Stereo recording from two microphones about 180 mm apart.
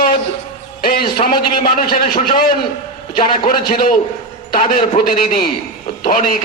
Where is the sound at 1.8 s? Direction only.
55° left (ahead or behind).